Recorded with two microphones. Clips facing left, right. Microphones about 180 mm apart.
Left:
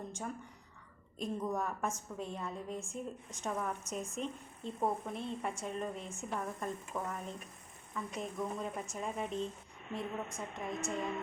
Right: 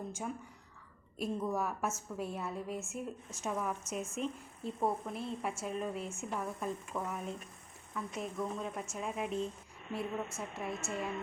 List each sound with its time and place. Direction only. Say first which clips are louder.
1.2 s a woman's voice: right 1 dB; 5° right (ahead or behind)